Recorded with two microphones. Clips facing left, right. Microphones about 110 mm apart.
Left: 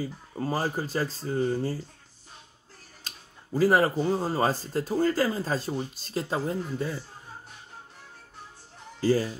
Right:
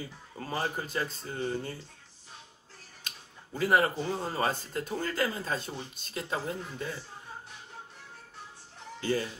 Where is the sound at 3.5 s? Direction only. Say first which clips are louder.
Left 4 dB; 35° left (ahead or behind).